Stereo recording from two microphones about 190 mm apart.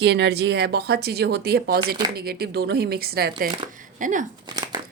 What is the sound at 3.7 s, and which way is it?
Speech, 45° right (ahead or behind).